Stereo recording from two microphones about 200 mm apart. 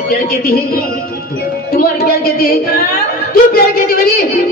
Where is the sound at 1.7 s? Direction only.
50° left (ahead or behind).